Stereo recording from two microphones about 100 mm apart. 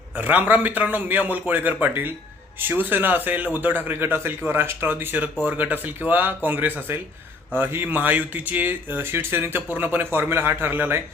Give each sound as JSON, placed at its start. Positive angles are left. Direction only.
{"t": 0.2, "sound": "a man's voice", "side_deg": -15}